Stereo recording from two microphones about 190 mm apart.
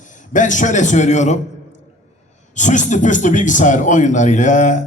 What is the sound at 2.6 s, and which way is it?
Speech, 40° left (ahead or behind).